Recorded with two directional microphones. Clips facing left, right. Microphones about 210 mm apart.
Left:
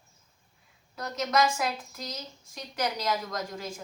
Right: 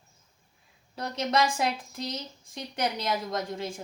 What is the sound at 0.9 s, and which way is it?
A woman's voice, 30° right (ahead or behind).